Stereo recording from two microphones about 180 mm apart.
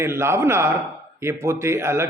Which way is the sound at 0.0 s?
15° right (ahead or behind).